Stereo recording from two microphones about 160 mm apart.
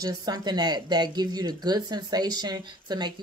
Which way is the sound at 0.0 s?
25° right (ahead or behind).